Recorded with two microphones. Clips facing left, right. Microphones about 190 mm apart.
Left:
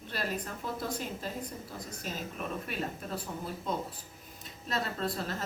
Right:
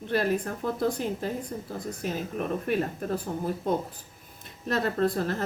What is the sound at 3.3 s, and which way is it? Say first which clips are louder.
Speech: right 7 dB; 40° right (ahead or behind).